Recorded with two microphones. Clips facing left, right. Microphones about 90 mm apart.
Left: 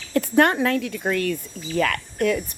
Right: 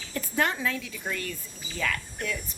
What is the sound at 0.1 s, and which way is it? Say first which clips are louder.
Speech: left 10 dB; 60° left (ahead or behind).